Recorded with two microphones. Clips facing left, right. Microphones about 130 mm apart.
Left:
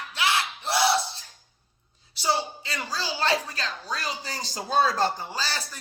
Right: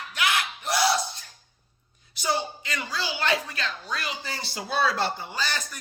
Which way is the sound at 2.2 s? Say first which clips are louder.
Left 1 dB; 30° left (ahead or behind).